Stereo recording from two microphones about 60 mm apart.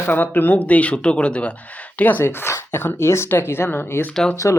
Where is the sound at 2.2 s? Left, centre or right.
Left.